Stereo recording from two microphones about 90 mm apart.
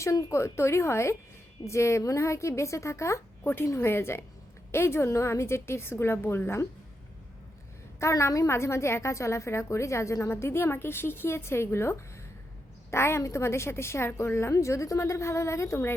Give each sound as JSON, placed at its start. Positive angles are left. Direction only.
{"t": 0.0, "sound": "a woman's voice", "side_deg": 35}
{"t": 7.9, "sound": "a woman's voice", "side_deg": 35}